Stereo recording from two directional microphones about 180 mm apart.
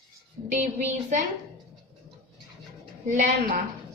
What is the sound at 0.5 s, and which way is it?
Speech, 40° right (ahead or behind).